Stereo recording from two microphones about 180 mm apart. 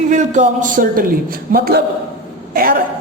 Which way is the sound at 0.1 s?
45° right (ahead or behind).